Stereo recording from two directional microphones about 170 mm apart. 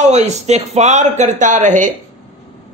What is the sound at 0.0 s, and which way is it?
A man's voice, 40° right (ahead or behind).